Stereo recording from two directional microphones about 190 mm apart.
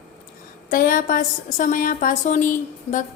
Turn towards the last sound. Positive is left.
turn(degrees=45)  # may be behind; listen again after turning